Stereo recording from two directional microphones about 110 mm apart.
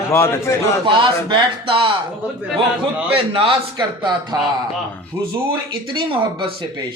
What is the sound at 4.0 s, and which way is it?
Speech, 40° right (ahead or behind).